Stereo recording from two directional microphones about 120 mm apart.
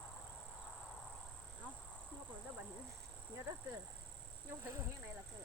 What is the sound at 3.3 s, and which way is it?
Speech, 25° right (ahead or behind).